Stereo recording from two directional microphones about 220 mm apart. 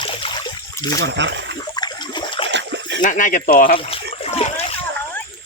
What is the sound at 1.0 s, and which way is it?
Speech, 55° right (ahead or behind).